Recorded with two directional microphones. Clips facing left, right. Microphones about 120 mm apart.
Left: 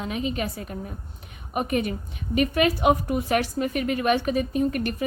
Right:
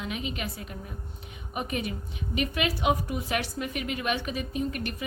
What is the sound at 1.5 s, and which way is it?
A woman's voice, 50° left (ahead or behind).